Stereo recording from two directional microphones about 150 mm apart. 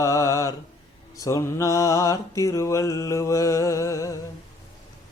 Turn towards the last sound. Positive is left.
turn(degrees=20)  # may be behind; listen again after turning